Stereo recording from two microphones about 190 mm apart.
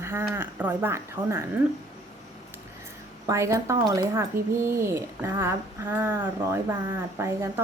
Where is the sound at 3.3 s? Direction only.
15° right (ahead or behind).